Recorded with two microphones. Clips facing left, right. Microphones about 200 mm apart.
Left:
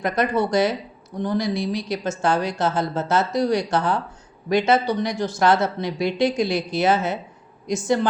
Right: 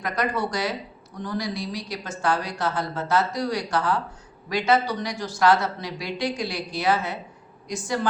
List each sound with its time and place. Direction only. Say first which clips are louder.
0.0 s speech: left 5 dB; 25° left (ahead or behind)